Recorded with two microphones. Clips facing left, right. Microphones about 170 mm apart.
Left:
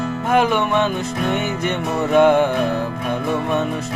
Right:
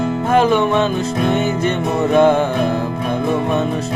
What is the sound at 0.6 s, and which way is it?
Music, 20° right (ahead or behind).